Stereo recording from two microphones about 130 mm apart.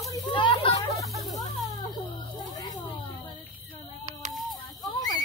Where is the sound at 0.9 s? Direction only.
Centre (ahead or behind).